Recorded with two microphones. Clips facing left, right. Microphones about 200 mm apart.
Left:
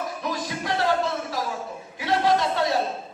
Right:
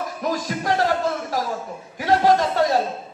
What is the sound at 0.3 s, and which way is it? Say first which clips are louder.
Music: right 6 dB; 40° right (ahead or behind).